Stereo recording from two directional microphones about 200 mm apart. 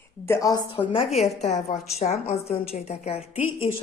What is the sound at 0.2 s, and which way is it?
A woman's voice, 15° left (ahead or behind).